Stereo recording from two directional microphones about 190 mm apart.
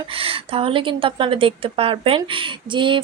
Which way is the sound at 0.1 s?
30° right (ahead or behind).